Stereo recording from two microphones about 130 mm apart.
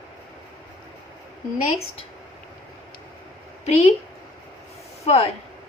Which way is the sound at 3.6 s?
55° left (ahead or behind).